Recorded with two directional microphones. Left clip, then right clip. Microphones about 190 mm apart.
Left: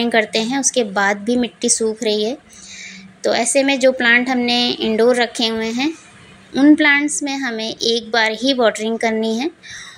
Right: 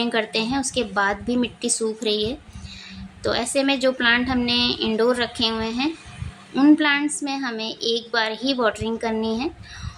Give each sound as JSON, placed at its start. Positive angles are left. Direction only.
{"t": 0.0, "sound": "a woman's voice", "side_deg": 20}